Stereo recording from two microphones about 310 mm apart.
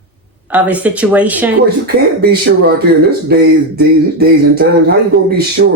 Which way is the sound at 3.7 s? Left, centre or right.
Right.